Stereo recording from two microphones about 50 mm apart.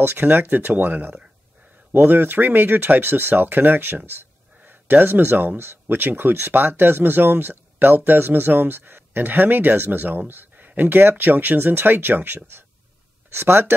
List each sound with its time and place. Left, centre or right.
0.0 s speech: right
13.3 s speech: right